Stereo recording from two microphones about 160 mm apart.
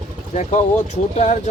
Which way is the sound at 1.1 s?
45° left (ahead or behind).